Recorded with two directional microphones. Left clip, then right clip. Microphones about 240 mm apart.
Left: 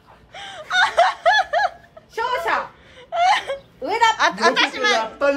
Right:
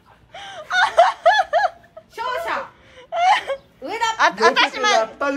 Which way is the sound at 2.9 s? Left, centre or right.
Centre.